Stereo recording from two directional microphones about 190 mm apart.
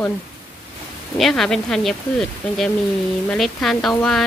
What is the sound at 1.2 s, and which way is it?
Speech, centre (ahead or behind).